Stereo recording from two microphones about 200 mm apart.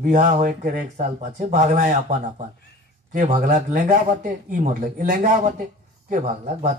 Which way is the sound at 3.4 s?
45° right (ahead or behind).